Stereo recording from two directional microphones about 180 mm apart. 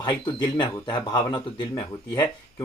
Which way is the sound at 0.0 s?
25° left (ahead or behind).